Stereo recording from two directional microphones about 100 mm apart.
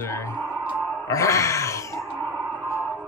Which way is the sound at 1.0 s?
35° left (ahead or behind).